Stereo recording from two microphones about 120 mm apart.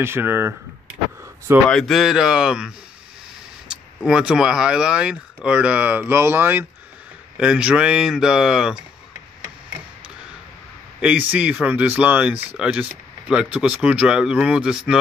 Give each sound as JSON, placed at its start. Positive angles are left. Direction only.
{"t": 0.0, "sound": "speech", "side_deg": -20}
{"t": 1.7, "sound": "speech", "side_deg": 0}
{"t": 11.0, "sound": "speech", "side_deg": -10}